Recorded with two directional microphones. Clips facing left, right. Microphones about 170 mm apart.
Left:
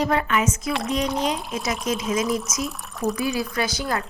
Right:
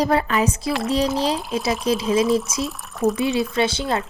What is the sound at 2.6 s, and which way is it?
Speech, centre (ahead or behind).